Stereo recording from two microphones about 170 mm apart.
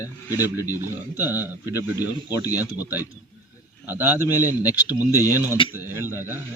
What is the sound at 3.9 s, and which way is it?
A man's voice, 10° right (ahead or behind).